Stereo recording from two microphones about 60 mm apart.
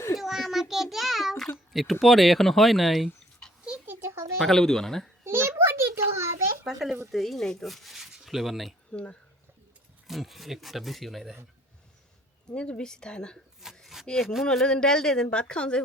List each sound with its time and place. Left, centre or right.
0.2 s child singing: centre
1.7 s speech: centre
4.0 s a sound: right
4.4 s a woman's voice: centre
5.2 s a sound: right
6.7 s speech: centre
8.9 s speech: centre
10.1 s speech: centre
12.5 s a woman's voice: centre
13.8 s a sound: centre
14.4 s a woman's voice: centre